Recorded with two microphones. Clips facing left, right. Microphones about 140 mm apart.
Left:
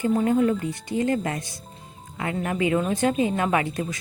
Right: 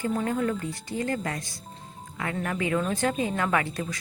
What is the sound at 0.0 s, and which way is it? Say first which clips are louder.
Speech: left 6 dB; 20° left (ahead or behind).